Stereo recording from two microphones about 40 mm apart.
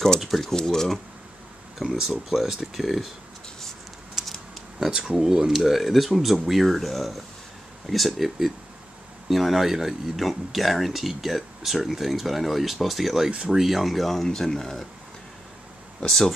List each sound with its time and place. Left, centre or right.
0.2 s speech: centre
0.5 s speech: centre
1.8 s speech: centre
4.7 s speech: centre
5.5 s speech: centre
16.0 s speech: centre